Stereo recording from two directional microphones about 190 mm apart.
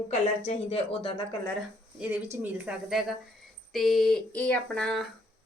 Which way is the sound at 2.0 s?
10° right (ahead or behind).